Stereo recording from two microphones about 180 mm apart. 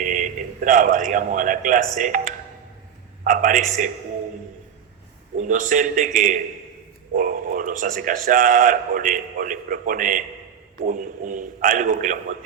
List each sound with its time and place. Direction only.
0.0 s a man's voice: 45° right (ahead or behind)
5.4 s speech: 45° right (ahead or behind)